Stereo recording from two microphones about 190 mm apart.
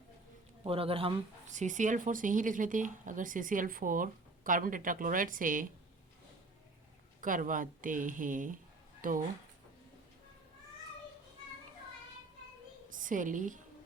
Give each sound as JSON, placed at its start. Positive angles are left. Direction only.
{"t": 0.6, "sound": "speech", "side_deg": -30}
{"t": 7.2, "sound": "speech", "side_deg": -45}
{"t": 9.0, "sound": "a sound", "side_deg": -45}
{"t": 12.9, "sound": "a woman's voice", "side_deg": -45}